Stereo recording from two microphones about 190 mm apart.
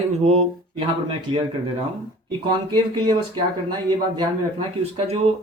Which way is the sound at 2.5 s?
25° right (ahead or behind).